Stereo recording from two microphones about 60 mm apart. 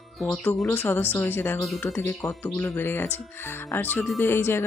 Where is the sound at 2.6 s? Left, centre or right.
Left.